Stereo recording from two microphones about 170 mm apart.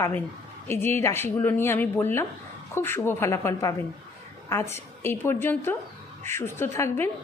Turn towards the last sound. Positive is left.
turn(degrees=15)  # may be behind; listen again after turning